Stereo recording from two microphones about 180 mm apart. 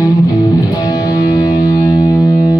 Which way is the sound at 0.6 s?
20° left (ahead or behind).